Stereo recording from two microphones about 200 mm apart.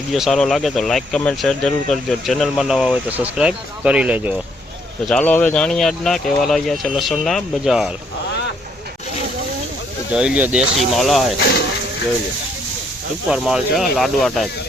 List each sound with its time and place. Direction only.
0.1 s speech: centre (ahead or behind)
5.0 s speech: 5° left (ahead or behind)
10.1 s speech: 5° right (ahead or behind)
13.3 s speech: centre (ahead or behind)